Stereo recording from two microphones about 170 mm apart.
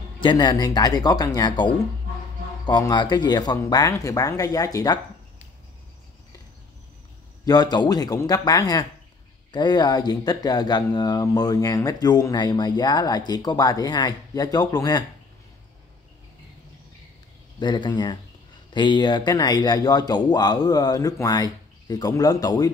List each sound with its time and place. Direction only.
0.2 s speech: 25° left (ahead or behind)
7.4 s speech: 25° left (ahead or behind)
17.6 s speech: 25° left (ahead or behind)